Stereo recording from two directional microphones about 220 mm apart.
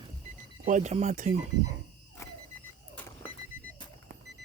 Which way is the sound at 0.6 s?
35° right (ahead or behind).